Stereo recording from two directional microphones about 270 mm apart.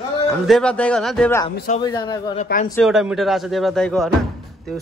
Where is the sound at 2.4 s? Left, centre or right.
Left.